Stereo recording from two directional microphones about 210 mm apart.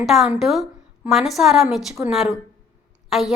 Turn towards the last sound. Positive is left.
turn(degrees=0)  # may be behind; listen again after turning